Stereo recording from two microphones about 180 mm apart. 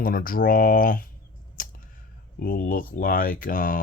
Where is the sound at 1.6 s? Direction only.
50° left (ahead or behind).